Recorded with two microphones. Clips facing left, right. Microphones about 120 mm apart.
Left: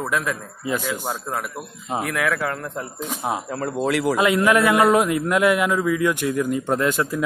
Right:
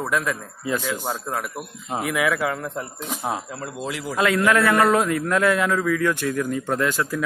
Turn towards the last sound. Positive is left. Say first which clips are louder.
# left 2 dB
turn(degrees=20)  # may be behind; listen again after turning